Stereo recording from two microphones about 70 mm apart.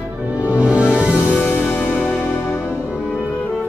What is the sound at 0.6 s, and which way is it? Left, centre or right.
Music, centre.